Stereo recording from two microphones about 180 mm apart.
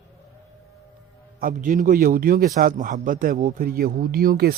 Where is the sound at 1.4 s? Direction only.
50° right (ahead or behind).